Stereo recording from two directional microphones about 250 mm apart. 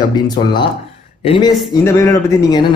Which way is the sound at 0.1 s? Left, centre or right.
Centre.